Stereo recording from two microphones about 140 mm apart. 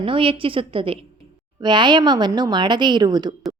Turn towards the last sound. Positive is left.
turn(degrees=-30)  # may be behind; listen again after turning